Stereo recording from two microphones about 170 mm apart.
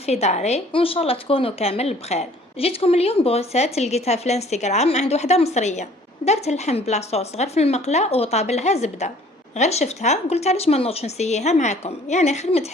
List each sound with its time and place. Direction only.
0.0 s a woman's voice: 40° left (ahead or behind)